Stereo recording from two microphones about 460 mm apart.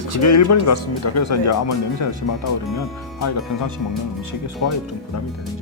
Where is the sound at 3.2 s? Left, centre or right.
Left.